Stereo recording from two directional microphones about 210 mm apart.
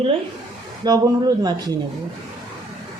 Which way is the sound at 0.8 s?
20° right (ahead or behind).